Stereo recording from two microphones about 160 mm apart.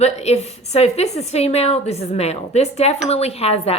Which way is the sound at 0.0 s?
40° left (ahead or behind).